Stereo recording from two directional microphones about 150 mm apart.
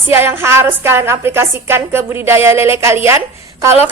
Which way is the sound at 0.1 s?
15° right (ahead or behind).